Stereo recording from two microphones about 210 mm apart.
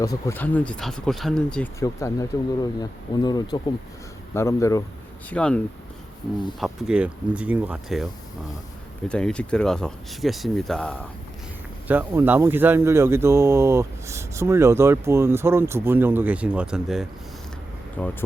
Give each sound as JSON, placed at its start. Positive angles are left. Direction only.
{"t": 0.0, "sound": "speech", "side_deg": 15}
{"t": 1.8, "sound": "speech", "side_deg": 15}
{"t": 6.6, "sound": "speech", "side_deg": -5}
{"t": 9.0, "sound": "speech", "side_deg": 5}
{"t": 11.9, "sound": "speech", "side_deg": -10}
{"t": 18.0, "sound": "speech", "side_deg": 10}